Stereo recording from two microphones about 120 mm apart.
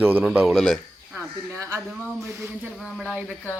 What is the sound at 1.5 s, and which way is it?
Speech, 25° right (ahead or behind).